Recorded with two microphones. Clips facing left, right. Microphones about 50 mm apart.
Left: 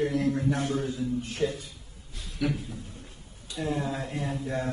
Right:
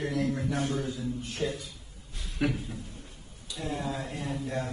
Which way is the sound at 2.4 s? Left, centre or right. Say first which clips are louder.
Even; right.